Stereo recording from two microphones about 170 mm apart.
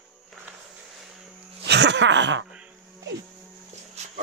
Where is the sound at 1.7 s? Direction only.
90° right.